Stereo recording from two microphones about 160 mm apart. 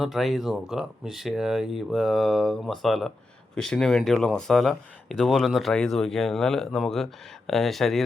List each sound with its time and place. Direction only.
0.0 s speech: centre (ahead or behind)